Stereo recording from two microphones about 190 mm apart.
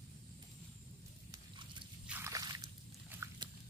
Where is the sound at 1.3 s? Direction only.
25° right (ahead or behind).